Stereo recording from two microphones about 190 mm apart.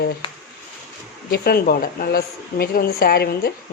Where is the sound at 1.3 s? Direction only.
55° left (ahead or behind).